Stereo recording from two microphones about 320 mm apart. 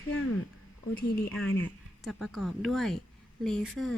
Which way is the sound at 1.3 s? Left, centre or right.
Centre.